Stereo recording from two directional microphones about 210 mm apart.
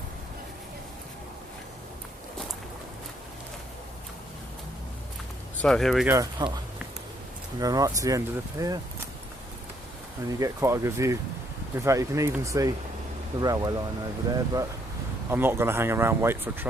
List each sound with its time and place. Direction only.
5.6 s speech: centre (ahead or behind)
6.4 s speech: 20° right (ahead or behind)
7.6 s speech: 15° right (ahead or behind)
10.4 s speech: 15° right (ahead or behind)